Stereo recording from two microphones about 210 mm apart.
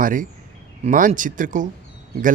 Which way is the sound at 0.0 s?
40° right (ahead or behind).